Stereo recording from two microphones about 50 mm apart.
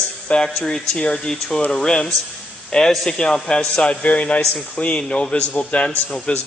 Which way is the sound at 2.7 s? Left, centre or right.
Centre.